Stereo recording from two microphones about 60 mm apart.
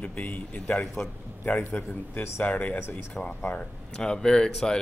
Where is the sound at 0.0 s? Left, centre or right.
Left.